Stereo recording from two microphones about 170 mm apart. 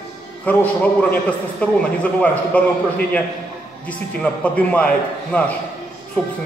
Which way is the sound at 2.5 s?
10° left (ahead or behind).